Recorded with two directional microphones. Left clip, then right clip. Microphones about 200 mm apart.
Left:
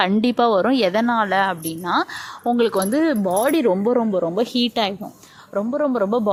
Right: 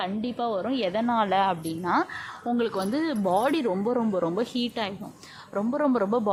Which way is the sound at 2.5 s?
25° left (ahead or behind).